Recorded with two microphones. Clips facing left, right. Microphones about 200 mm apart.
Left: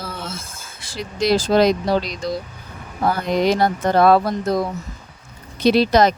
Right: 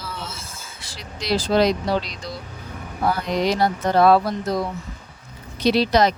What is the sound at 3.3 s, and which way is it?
Speech, 50° left (ahead or behind).